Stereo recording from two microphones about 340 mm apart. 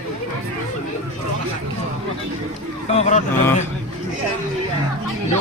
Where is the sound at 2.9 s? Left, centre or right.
Centre.